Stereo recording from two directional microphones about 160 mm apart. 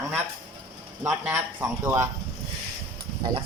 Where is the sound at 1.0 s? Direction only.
10° right (ahead or behind).